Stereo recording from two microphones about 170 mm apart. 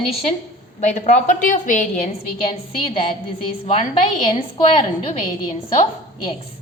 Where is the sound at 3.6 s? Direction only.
35° left (ahead or behind).